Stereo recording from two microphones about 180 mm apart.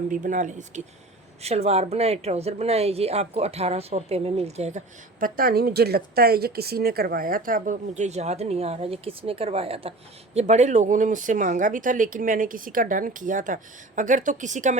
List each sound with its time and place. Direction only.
0.1 s a woman's voice: 45° right (ahead or behind)
5.2 s speech: 55° right (ahead or behind)